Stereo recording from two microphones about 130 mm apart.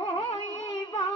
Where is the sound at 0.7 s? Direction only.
25° left (ahead or behind).